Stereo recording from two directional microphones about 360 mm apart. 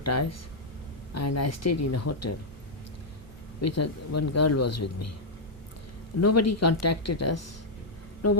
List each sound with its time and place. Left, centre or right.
0.0 s speech: left
3.6 s speech: left
6.1 s speech: left